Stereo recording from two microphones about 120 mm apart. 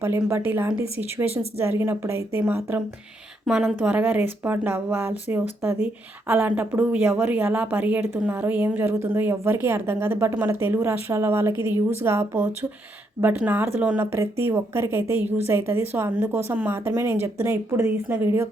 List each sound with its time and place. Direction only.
0.0 s a woman's voice: 20° right (ahead or behind)